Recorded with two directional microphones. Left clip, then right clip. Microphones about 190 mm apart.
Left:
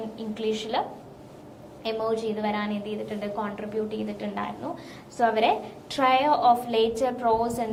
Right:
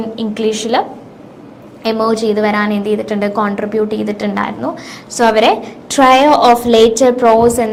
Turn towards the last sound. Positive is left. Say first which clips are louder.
# right 15 dB
turn(degrees=-45)  # may be behind; listen again after turning